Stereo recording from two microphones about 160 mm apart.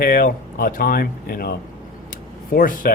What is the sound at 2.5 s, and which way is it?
Speech, 60° left (ahead or behind).